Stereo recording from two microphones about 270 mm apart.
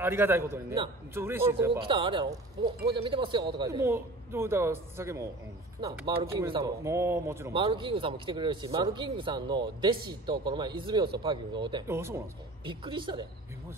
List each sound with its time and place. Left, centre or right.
0.0 s a man's voice: centre